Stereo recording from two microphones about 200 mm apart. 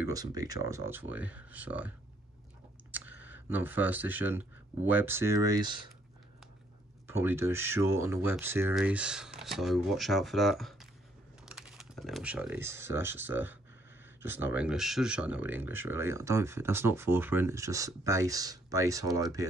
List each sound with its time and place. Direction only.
0.0 s speech: 20° right (ahead or behind)
2.9 s clicking: 10° right (ahead or behind)
3.4 s speech: 10° right (ahead or behind)
7.1 s speech: 10° right (ahead or behind)